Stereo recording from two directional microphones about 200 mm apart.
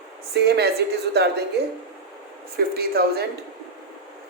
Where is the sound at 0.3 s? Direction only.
55° right (ahead or behind).